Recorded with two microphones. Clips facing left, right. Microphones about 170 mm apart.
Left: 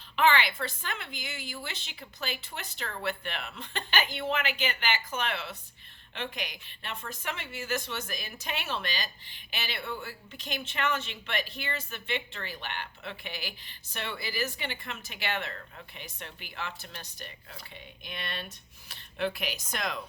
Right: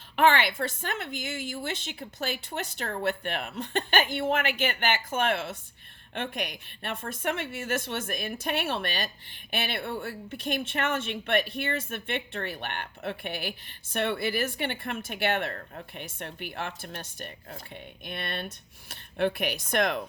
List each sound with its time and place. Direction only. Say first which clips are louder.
0.2 s a woman's voice: right 3 dB; 50° right (ahead or behind)